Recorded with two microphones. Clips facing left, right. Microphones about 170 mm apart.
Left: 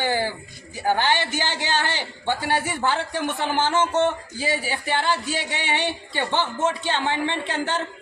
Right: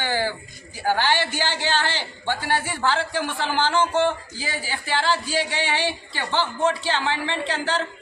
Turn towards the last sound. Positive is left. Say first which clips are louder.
# right 1 dB
turn(degrees=20)  # may be behind; listen again after turning